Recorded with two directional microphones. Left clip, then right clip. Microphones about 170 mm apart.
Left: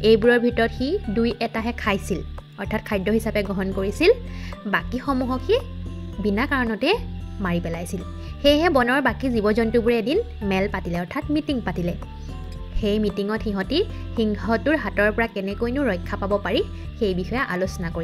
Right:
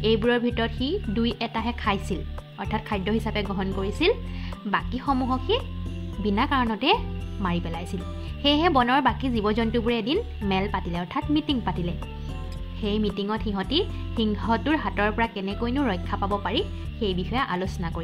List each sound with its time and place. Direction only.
0.0 s speech: 25° left (ahead or behind)